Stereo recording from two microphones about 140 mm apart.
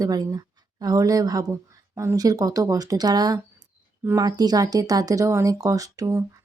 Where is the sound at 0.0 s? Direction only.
25° right (ahead or behind).